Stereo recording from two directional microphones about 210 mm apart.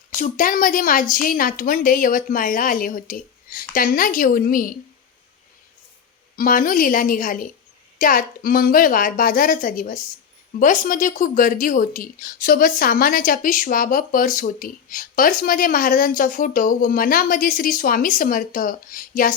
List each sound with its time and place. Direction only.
0.2 s speech: 40° left (ahead or behind)
6.3 s speech: 40° left (ahead or behind)